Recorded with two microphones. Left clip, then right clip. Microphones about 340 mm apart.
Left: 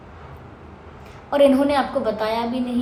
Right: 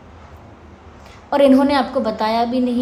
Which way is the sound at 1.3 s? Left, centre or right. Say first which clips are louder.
Right 3 dB; right.